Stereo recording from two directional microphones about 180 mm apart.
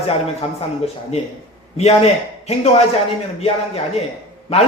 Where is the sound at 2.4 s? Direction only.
35° left (ahead or behind).